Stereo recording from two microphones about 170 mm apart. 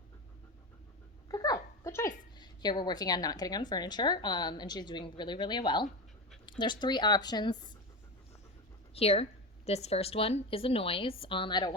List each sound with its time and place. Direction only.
1.3 s a woman's voice: 20° left (ahead or behind)
9.0 s speech: 35° left (ahead or behind)